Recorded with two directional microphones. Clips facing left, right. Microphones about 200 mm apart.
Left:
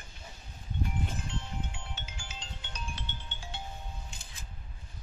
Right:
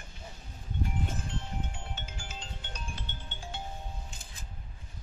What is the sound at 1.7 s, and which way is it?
Music, 50° right (ahead or behind).